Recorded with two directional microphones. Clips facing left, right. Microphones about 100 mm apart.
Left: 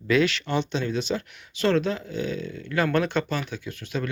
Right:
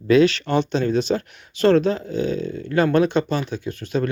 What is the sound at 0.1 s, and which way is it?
Speech, 30° right (ahead or behind).